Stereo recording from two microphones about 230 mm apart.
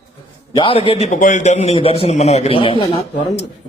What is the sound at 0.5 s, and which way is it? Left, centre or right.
A man's voice, left.